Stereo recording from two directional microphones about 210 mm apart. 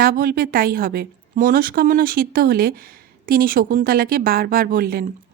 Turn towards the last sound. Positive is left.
turn(degrees=-45)  # may be behind; listen again after turning